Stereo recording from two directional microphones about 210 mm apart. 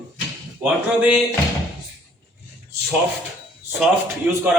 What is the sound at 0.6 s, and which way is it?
Speech, 5° right (ahead or behind).